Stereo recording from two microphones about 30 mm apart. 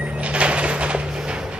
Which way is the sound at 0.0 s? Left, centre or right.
Right.